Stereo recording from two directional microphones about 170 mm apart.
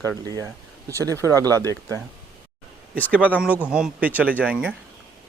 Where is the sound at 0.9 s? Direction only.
15° right (ahead or behind).